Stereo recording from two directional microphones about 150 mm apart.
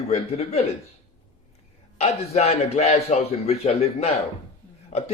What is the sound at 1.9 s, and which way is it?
A man's voice, 45° left (ahead or behind).